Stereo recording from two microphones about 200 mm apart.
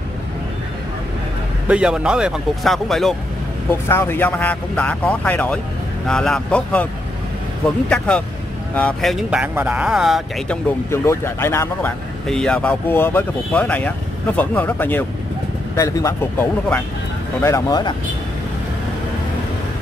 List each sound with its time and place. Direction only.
1.7 s speech: 5° right (ahead or behind)
3.9 s speech: 10° left (ahead or behind)
8.7 s speech: 5° left (ahead or behind)
10.9 s speech: 15° left (ahead or behind)